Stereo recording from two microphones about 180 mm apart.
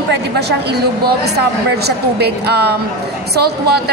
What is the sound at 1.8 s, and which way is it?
A woman's voice, 65° right (ahead or behind).